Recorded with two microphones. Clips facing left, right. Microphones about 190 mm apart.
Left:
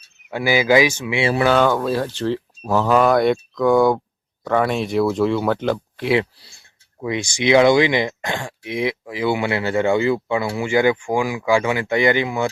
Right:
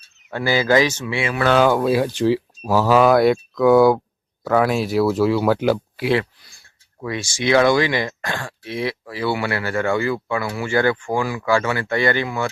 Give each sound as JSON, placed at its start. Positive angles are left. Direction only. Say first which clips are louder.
{"t": 0.3, "sound": "speech", "louder": "left 1 dB", "side_deg": 10}
{"t": 1.5, "sound": "speech", "louder": "right 4 dB", "side_deg": -5}
{"t": 6.3, "sound": "a sound", "louder": "left 2 dB", "side_deg": 30}
{"t": 7.0, "sound": "speech", "louder": "left 2 dB", "side_deg": 15}